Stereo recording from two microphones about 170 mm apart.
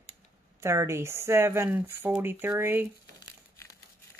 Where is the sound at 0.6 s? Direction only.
15° right (ahead or behind).